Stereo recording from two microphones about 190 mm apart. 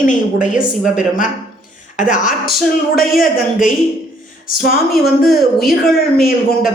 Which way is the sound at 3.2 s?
45° left (ahead or behind).